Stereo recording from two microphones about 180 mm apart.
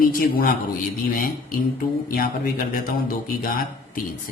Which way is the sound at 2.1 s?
55° left (ahead or behind).